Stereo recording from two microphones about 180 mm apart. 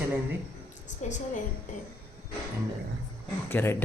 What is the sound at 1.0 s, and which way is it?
Speech, 40° left (ahead or behind).